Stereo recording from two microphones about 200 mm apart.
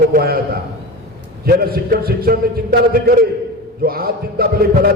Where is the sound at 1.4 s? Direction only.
50° right (ahead or behind).